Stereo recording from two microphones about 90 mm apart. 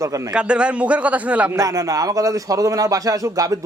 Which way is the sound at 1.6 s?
40° right (ahead or behind).